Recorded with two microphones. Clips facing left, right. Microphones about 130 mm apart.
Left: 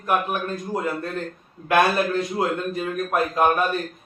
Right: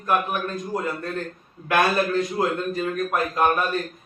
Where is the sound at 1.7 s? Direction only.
25° left (ahead or behind).